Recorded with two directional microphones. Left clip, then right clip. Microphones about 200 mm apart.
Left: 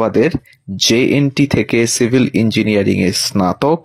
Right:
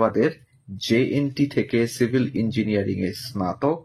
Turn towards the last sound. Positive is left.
turn(degrees=40)  # may be behind; listen again after turning